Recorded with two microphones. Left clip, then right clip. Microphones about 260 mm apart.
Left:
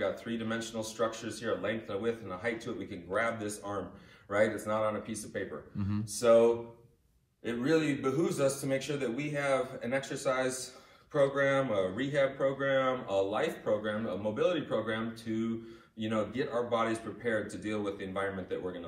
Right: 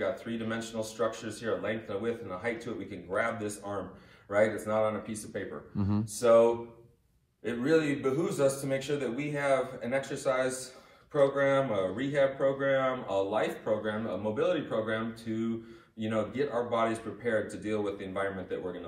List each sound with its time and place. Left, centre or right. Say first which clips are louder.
0.0 s speech: right 1 dB; centre
5.8 s speech: right 7 dB; centre
6.1 s speech: right 1 dB; centre